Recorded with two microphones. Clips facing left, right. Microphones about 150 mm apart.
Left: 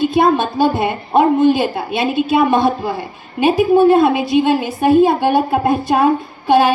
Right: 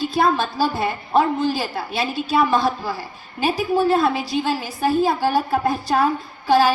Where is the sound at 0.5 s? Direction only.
20° left (ahead or behind).